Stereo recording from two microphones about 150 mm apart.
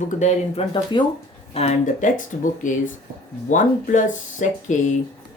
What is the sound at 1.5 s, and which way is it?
Speech, 50° left (ahead or behind).